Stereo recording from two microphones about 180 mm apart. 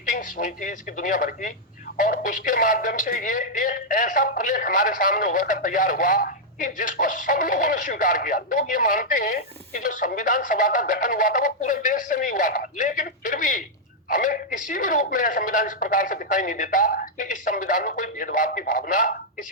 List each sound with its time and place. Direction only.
0.1 s speech: 45° left (ahead or behind)